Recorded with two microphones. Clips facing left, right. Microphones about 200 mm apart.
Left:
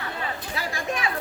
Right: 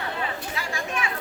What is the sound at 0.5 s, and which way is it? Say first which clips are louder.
Chatter: left 1 dB; 35° left (ahead or behind).